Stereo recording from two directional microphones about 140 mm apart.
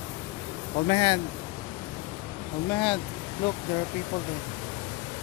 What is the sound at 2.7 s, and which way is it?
Speech, 10° left (ahead or behind).